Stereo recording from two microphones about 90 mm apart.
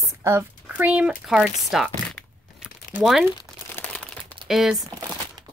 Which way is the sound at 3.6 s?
20° left (ahead or behind).